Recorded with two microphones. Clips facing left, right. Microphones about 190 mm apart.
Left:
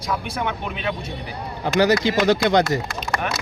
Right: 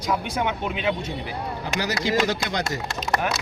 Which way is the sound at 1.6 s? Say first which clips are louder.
Left 10 dB; 65° left (ahead or behind).